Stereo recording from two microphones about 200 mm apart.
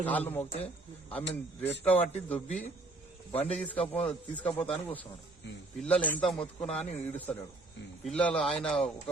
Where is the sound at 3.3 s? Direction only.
30° left (ahead or behind).